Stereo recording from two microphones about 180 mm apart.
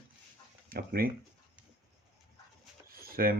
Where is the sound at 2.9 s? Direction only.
55° right (ahead or behind).